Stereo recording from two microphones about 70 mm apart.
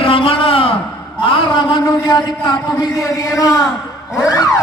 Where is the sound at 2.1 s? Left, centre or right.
Left.